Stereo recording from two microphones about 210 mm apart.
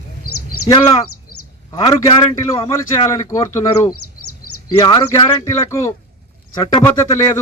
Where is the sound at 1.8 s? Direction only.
20° left (ahead or behind).